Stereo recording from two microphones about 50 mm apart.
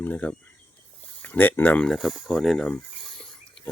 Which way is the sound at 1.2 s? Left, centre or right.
Left.